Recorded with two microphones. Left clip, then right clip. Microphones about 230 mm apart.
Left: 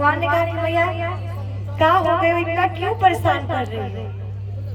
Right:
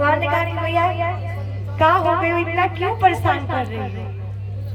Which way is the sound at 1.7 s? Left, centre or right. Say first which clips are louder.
Even; right.